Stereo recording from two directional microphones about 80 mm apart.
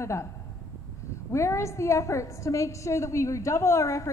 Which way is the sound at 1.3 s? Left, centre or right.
Left.